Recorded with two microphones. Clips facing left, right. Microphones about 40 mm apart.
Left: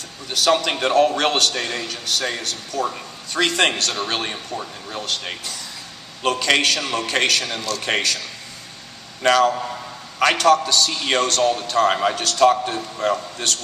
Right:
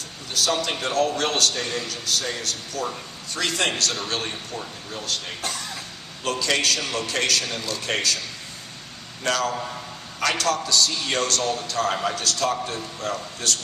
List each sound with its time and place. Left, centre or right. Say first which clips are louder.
0.3 s a man's voice: left 5 dB; left
2.7 s speech: left 6 dB; left
3.3 s a man's voice: left 6 dB; left
4.9 s a man's voice: left 4 dB; left
6.4 s a man's voice: left 4 dB; left
9.2 s a man's voice: left 8 dB; left